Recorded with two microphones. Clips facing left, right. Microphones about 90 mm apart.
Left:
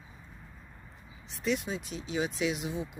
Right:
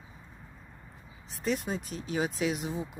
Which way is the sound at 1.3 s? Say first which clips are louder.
Even; 40° right (ahead or behind).